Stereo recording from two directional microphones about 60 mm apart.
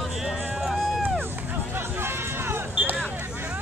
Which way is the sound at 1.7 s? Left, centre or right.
Right.